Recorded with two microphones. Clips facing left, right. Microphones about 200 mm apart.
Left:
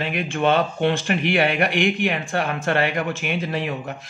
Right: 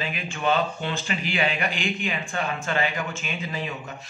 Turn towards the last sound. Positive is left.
turn(degrees=70)  # may be behind; listen again after turning